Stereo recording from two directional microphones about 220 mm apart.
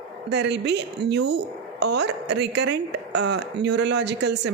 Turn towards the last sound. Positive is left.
turn(degrees=-50)  # may be behind; listen again after turning